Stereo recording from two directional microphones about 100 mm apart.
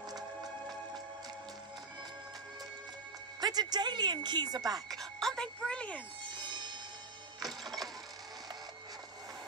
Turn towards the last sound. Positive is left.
turn(degrees=0)  # may be behind; listen again after turning